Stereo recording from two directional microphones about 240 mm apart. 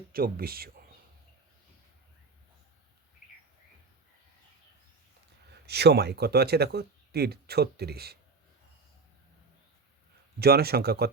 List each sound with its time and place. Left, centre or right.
0.1 s speech: right
5.6 s speech: right
10.4 s speech: right